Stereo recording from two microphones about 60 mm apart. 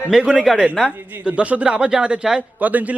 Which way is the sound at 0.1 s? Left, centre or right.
Centre.